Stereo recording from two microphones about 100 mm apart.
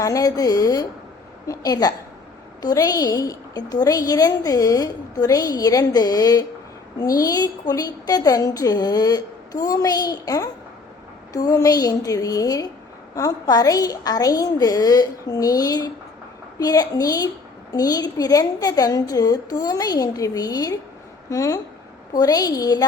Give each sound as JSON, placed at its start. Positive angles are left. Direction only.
{"t": 0.0, "sound": "a woman's voice", "side_deg": 35}